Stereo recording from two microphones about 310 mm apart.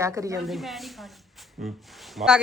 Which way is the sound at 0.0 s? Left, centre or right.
Centre.